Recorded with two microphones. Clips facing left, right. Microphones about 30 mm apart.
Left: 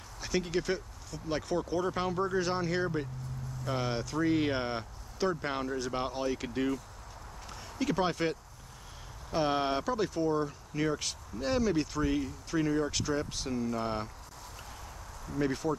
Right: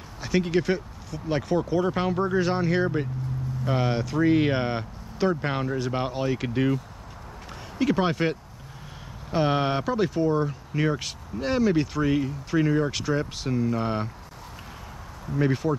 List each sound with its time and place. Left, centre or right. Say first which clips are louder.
0.2 s speech: right 8 dB; centre
15.2 s speech: right 7 dB; right